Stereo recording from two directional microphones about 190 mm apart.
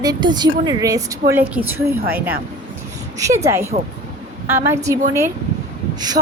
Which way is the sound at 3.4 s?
15° right (ahead or behind).